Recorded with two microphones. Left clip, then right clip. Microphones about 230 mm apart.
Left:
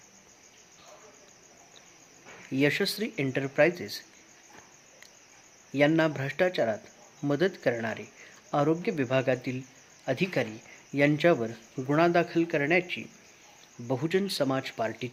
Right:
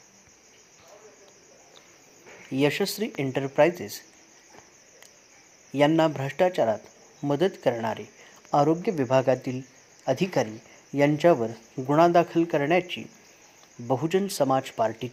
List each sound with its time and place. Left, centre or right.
2.5 s speech: centre
5.7 s speech: centre